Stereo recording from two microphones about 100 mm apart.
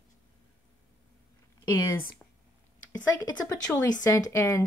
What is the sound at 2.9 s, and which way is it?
Speech, 25° left (ahead or behind).